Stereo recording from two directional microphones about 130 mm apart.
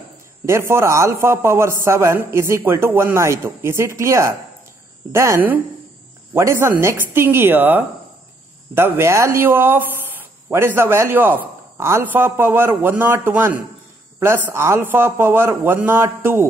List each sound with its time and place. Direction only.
0.5 s a man's voice: 20° right (ahead or behind)